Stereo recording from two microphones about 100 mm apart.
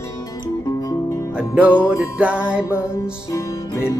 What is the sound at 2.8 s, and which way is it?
Music, 30° left (ahead or behind).